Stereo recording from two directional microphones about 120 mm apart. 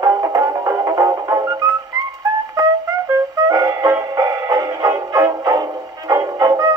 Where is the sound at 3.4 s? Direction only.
30° right (ahead or behind).